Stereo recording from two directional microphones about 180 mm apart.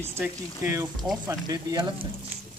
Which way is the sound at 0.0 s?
15° right (ahead or behind).